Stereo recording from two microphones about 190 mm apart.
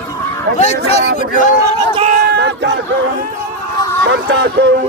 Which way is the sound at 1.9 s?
35° right (ahead or behind).